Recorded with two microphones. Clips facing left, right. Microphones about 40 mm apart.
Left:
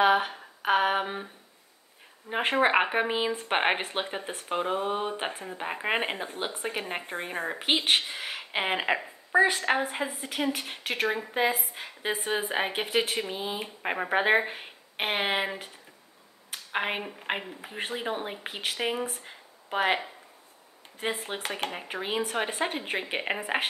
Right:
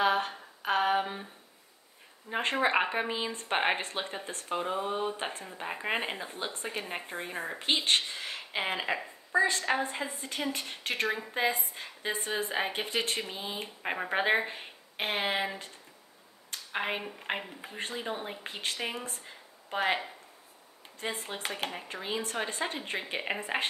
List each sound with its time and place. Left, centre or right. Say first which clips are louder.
0.0 s a sound: left 5 dB; left
2.2 s speech: left 4 dB; centre
11.7 s speech: left 3 dB; left
13.0 s speech: left 3 dB; centre
21.0 s speech: left 4 dB; left
23.2 s speech: left 1 dB; centre